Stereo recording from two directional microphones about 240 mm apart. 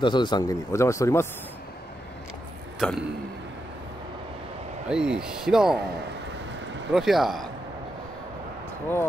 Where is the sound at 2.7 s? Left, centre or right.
Centre.